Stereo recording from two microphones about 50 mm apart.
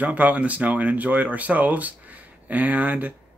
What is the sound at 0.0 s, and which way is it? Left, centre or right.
Speech, right.